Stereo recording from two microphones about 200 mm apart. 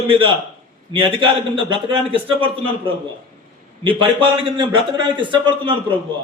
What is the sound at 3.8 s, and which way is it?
A man's voice, 25° right (ahead or behind).